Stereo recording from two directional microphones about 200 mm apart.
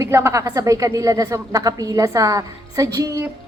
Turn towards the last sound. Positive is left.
turn(degrees=-15)  # may be behind; listen again after turning